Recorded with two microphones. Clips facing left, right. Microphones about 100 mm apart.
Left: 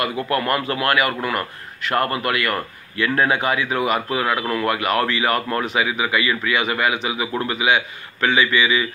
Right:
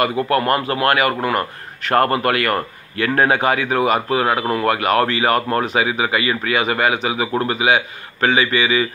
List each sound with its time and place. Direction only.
0.0 s speech: 35° right (ahead or behind)